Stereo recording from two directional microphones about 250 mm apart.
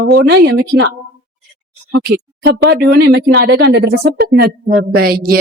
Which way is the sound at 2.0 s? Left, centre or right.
Right.